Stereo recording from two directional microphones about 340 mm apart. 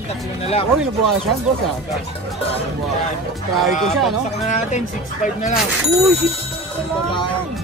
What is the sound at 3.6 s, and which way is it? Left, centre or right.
Speech, centre.